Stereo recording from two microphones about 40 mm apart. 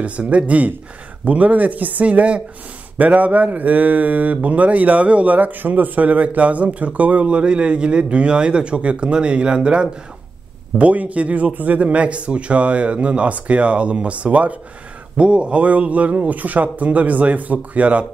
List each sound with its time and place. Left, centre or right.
0.0 s speech: right
2.0 s speech: right
10.8 s speech: right